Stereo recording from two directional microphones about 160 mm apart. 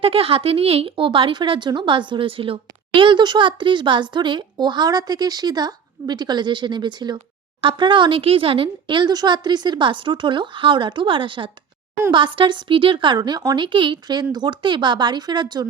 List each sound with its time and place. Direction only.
0.0 s speech: 35° right (ahead or behind)